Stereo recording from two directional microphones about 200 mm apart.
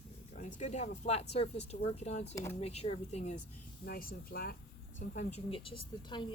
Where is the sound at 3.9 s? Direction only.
45° left (ahead or behind).